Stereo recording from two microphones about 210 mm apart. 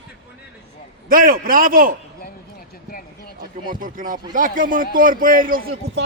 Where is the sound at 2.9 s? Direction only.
45° left (ahead or behind).